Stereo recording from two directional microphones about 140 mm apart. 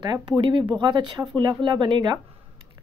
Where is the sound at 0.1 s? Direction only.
30° right (ahead or behind).